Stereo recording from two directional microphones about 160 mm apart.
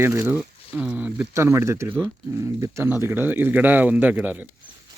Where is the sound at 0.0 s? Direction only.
15° right (ahead or behind).